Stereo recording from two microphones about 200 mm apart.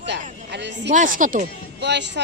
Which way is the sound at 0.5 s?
60° right (ahead or behind).